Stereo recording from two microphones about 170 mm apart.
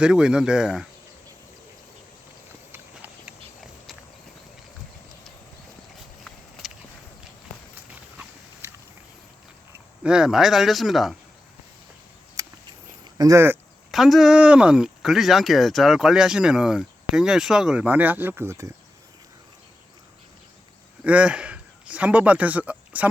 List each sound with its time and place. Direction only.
0.0 s speech: 5° right (ahead or behind)
2.7 s horse: 10° right (ahead or behind)
10.0 s speech: 5° right (ahead or behind)
12.4 s a sound: 20° right (ahead or behind)
13.1 s speech: 20° right (ahead or behind)
13.9 s speech: centre (ahead or behind)
21.0 s a man's voice: 5° right (ahead or behind)